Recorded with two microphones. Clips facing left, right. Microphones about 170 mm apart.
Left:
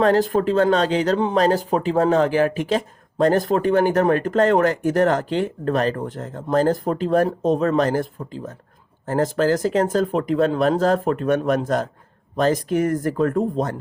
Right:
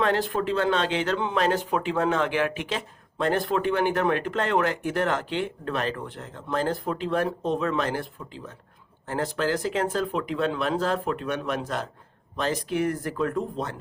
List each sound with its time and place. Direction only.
0.0 s speech: 40° left (ahead or behind)